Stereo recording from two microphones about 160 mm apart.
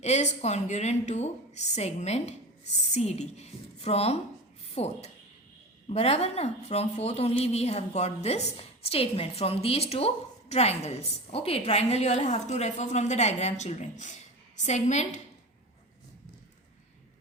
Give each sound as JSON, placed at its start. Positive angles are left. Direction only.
{"t": 0.0, "sound": "a woman's voice", "side_deg": 45}